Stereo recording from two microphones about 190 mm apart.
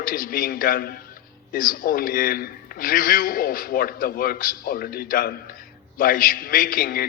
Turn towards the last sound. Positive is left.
turn(degrees=50)  # may be behind; listen again after turning